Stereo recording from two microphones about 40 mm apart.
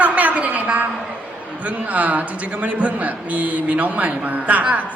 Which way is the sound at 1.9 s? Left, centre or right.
Right.